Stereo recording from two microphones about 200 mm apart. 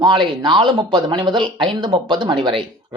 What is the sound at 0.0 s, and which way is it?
Speech, 25° right (ahead or behind).